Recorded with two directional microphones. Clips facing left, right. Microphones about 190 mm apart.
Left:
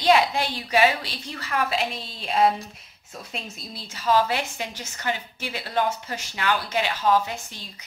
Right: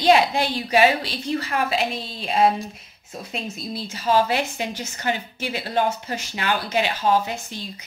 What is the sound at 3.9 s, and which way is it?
Speech, 25° right (ahead or behind).